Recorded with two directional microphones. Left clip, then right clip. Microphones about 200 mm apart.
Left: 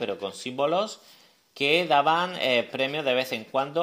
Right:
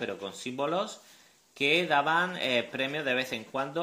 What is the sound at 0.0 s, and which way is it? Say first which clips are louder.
Speech: left 5 dB; 30° left (ahead or behind).